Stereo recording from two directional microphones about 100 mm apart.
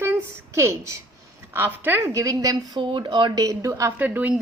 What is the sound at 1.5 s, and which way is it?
Speech, 20° right (ahead or behind).